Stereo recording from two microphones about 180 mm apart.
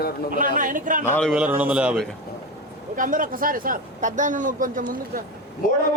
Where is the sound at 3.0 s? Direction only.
50° right (ahead or behind).